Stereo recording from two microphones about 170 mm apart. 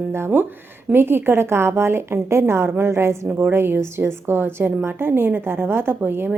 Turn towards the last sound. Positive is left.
turn(degrees=-10)  # may be behind; listen again after turning